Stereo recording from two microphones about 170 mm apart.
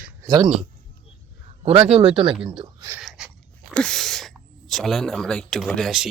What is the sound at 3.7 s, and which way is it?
Speech, 5° left (ahead or behind).